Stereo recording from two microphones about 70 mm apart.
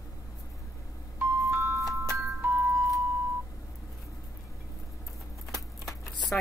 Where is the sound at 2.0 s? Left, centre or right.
Right.